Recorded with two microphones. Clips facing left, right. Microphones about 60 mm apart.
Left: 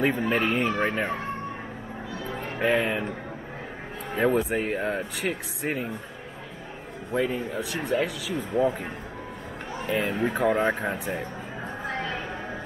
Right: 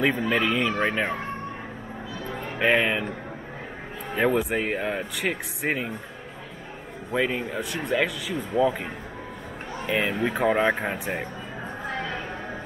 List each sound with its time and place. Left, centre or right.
0.3 s speech: right
0.7 s speech: right
2.6 s speech: right
4.1 s speech: right
7.1 s speech: right
9.8 s speech: right